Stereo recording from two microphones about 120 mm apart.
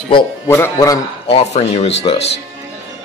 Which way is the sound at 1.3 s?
60° left (ahead or behind).